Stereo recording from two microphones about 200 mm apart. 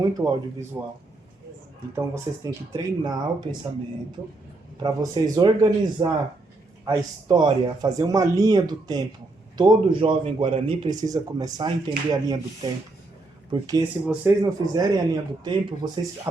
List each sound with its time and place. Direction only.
0.0 s speech: 20° right (ahead or behind)
2.0 s speech: 15° right (ahead or behind)
4.8 s speech: 20° right (ahead or behind)
13.5 s speech: 20° right (ahead or behind)
14.0 s speech: 5° right (ahead or behind)
14.4 s speech: 20° right (ahead or behind)